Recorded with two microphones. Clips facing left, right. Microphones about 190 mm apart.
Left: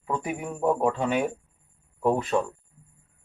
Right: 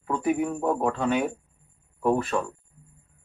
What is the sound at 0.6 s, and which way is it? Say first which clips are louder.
Speech: left 1 dB; 15° left (ahead or behind).